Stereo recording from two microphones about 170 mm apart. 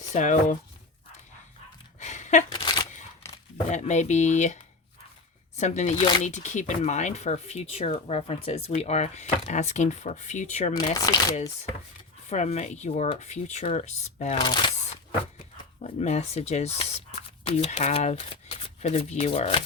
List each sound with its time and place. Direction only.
0.1 s speech: 45° left (ahead or behind)
2.0 s a sound: 45° left (ahead or behind)
2.5 s a sound: 25° left (ahead or behind)
3.7 s speech: 45° left (ahead or behind)
5.5 s speech: 45° left (ahead or behind)
10.8 s speech: 25° left (ahead or behind)
12.3 s speech: 40° left (ahead or behind)
14.3 s speech: 30° left (ahead or behind)
15.8 s speech: 40° left (ahead or behind)